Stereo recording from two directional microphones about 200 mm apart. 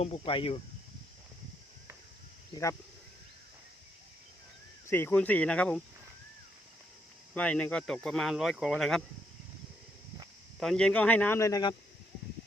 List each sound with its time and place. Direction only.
0.0 s speech: 30° left (ahead or behind)
2.5 s speech: 15° left (ahead or behind)
4.9 s speech: 10° left (ahead or behind)
7.3 s speech: 5° left (ahead or behind)
10.6 s speech: centre (ahead or behind)